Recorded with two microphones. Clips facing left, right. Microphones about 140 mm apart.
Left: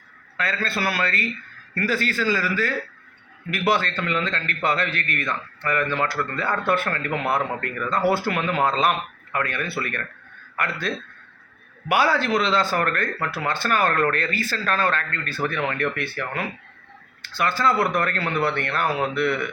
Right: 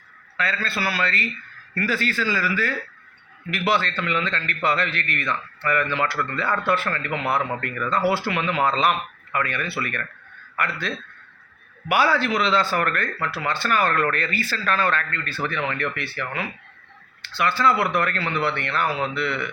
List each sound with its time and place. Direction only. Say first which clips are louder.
0.3 s a man's voice: left 1 dB; 45° left (ahead or behind)
13.2 s a man's voice: right 1 dB; 50° left (ahead or behind)